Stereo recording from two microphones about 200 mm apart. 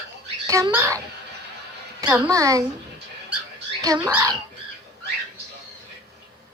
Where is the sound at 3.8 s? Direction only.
15° right (ahead or behind).